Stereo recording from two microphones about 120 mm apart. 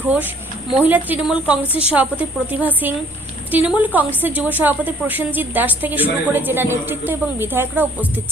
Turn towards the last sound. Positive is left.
turn(degrees=-20)  # may be behind; listen again after turning